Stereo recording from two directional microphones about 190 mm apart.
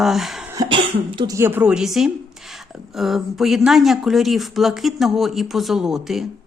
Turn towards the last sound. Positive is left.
turn(degrees=0)  # may be behind; listen again after turning